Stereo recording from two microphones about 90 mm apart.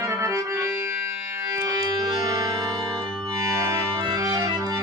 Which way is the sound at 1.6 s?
40° right (ahead or behind).